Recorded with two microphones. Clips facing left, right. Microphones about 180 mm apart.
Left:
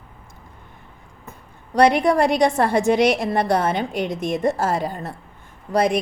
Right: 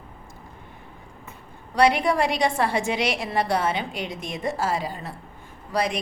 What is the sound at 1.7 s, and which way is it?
A woman's voice, 50° left (ahead or behind).